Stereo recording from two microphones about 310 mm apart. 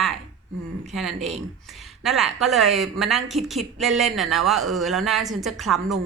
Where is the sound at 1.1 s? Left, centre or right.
Right.